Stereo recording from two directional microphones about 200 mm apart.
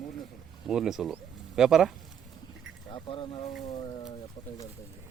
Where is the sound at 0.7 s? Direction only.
Centre (ahead or behind).